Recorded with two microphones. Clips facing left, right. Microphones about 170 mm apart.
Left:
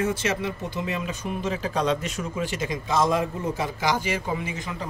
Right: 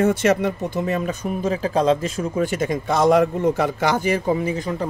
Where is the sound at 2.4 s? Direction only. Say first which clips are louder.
Right 7 dB; 50° right (ahead or behind).